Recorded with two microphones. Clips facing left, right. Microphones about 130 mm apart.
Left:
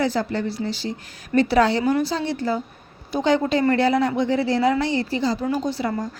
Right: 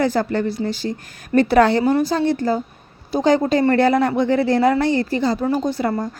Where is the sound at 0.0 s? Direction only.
50° right (ahead or behind).